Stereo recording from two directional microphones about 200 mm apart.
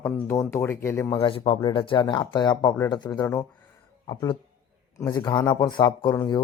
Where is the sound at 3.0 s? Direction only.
10° left (ahead or behind).